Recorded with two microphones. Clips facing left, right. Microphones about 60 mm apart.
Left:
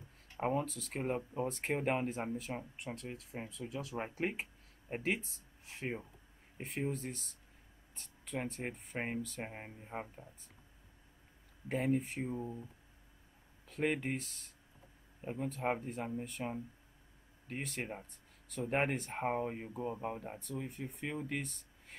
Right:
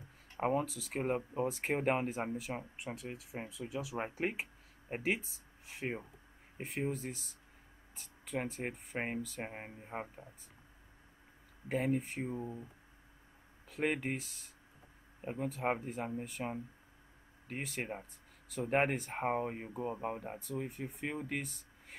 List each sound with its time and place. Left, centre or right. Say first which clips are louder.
0.4 s speech: right 2 dB; centre
1.1 s speech: right 2 dB; centre
1.5 s speech: right 1 dB; centre
11.7 s speech: even; centre
13.7 s speech: even; centre
15.4 s speech: right 1 dB; centre